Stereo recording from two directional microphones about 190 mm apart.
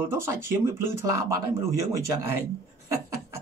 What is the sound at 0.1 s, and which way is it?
Speech, 15° right (ahead or behind).